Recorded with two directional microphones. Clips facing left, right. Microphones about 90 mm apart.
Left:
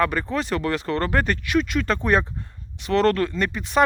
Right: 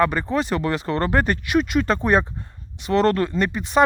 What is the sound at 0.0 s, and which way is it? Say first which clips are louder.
Speech: right 3 dB; 15° right (ahead or behind).